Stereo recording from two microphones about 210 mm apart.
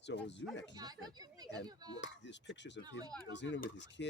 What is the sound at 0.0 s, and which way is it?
Speech, 55° left (ahead or behind).